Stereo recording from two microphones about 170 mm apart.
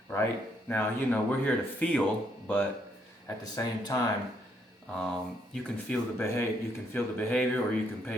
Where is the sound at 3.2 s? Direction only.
20° left (ahead or behind).